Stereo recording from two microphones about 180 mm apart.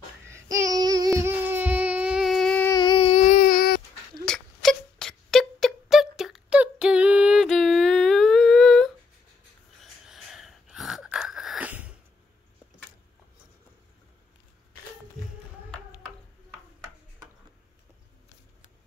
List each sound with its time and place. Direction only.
0.3 s child singing: 20° right (ahead or behind); by 2.7 s 5° left (ahead or behind)
2.7 s a sound: 25° left (ahead or behind); by 3.8 s 55° left (ahead or behind)
4.3 s wail: centre (ahead or behind)
10.0 s wheeze: centre (ahead or behind)